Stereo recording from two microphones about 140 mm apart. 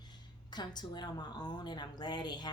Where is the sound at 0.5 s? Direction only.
30° left (ahead or behind).